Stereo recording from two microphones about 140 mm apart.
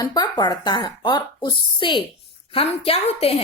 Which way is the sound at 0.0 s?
30° left (ahead or behind).